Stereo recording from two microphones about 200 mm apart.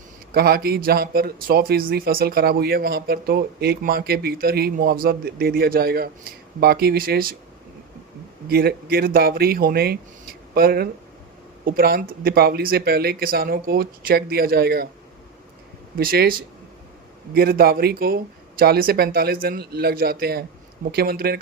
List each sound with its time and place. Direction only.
0.3 s speech: 50° right (ahead or behind)
8.4 s speech: 50° right (ahead or behind)
16.0 s speech: 50° right (ahead or behind)